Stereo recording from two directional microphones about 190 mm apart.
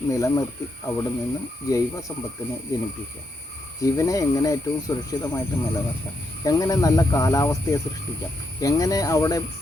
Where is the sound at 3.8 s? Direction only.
15° left (ahead or behind).